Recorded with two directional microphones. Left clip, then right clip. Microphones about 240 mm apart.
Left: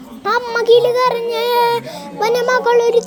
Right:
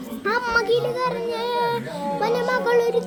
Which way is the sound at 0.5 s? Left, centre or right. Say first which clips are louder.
Left 12 dB; left.